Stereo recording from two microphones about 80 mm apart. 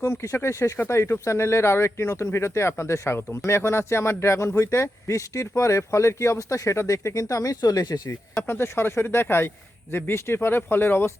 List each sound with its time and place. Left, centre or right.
0.0 s speech: left
8.4 s speech: left